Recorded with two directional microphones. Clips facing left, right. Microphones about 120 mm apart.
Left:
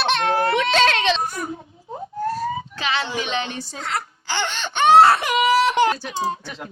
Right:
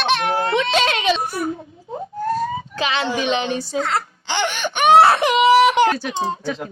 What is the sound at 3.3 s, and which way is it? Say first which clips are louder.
Speech: right 6 dB; 20° right (ahead or behind).